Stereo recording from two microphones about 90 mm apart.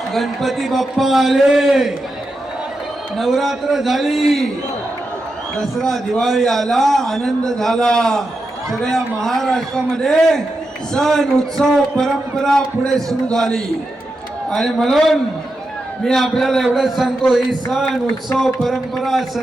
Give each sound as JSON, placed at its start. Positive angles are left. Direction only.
{"t": 0.1, "sound": "a man's voice", "side_deg": 0}
{"t": 3.2, "sound": "a man's voice", "side_deg": 0}
{"t": 5.5, "sound": "a man's voice", "side_deg": 5}